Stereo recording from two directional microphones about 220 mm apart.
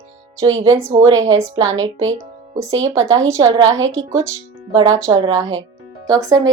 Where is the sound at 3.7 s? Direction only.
60° right (ahead or behind).